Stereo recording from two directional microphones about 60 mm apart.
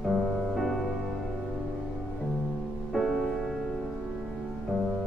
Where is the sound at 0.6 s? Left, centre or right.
Centre.